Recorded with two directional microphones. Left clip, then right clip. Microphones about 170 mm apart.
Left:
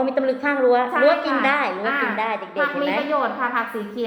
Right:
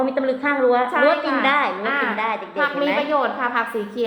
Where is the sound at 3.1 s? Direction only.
25° right (ahead or behind).